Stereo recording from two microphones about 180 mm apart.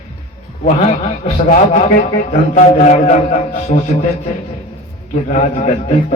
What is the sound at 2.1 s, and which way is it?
A man's voice, 45° left (ahead or behind).